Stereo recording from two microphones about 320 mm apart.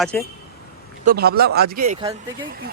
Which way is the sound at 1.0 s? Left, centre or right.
Right.